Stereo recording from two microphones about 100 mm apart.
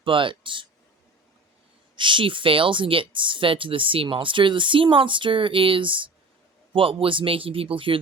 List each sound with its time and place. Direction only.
0.0 s speech: 60° right (ahead or behind)
2.0 s speech: 55° right (ahead or behind)